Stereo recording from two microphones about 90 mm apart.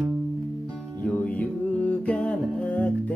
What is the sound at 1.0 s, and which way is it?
Music, 15° left (ahead or behind).